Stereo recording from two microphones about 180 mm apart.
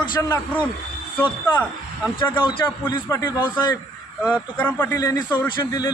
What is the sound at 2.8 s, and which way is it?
Speech, 20° left (ahead or behind).